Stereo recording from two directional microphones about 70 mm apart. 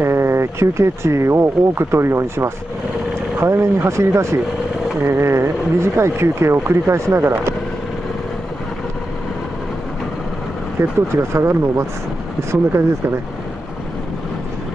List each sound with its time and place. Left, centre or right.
0.0 s speech: right
10.8 s speech: right